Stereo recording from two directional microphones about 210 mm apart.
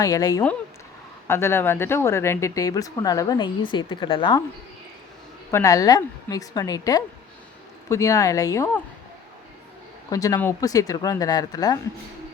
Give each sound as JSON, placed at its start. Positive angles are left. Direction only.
{"t": 0.0, "sound": "speech", "side_deg": 15}
{"t": 5.5, "sound": "speech", "side_deg": 15}
{"t": 10.1, "sound": "speech", "side_deg": 15}